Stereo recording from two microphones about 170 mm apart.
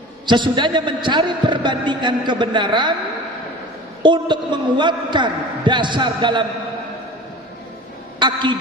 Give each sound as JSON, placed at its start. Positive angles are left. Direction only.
{"t": 0.3, "sound": "a man's voice", "side_deg": -25}
{"t": 4.0, "sound": "a man's voice", "side_deg": -25}
{"t": 8.2, "sound": "a woman's voice", "side_deg": -25}